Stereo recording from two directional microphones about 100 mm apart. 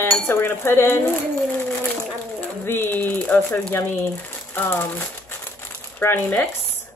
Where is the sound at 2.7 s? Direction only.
20° left (ahead or behind).